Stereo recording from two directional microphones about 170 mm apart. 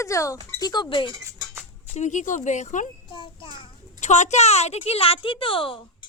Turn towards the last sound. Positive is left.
turn(degrees=30)  # may be behind; listen again after turning